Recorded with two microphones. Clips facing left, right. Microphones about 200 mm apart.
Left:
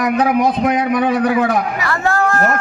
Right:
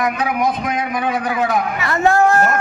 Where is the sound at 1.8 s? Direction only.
20° right (ahead or behind).